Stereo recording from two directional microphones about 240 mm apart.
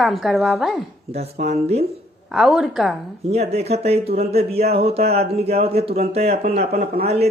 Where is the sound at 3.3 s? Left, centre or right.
Right.